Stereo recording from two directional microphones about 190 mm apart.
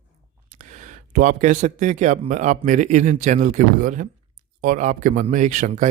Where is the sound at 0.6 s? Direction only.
40° right (ahead or behind).